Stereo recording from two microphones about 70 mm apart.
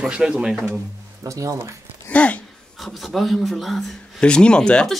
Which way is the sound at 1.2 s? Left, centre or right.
Right.